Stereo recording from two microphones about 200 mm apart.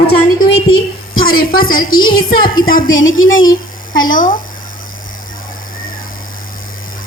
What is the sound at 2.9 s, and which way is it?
Speech, 80° left.